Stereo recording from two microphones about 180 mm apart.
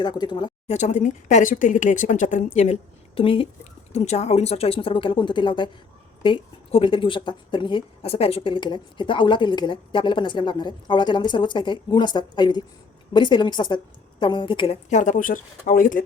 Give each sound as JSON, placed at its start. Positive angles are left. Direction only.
{"t": 0.0, "sound": "speech", "side_deg": 25}
{"t": 0.7, "sound": "speech", "side_deg": 40}
{"t": 3.2, "sound": "a woman's voice", "side_deg": 30}
{"t": 14.8, "sound": "speech", "side_deg": 45}